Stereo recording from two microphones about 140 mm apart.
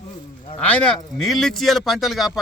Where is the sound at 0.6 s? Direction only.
5° left (ahead or behind).